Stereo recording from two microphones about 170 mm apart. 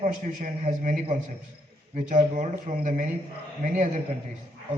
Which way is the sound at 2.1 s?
50° right (ahead or behind).